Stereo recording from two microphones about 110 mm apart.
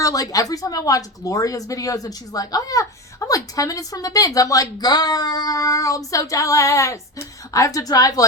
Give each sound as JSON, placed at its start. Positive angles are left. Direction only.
{"t": 0.0, "sound": "speech", "side_deg": 35}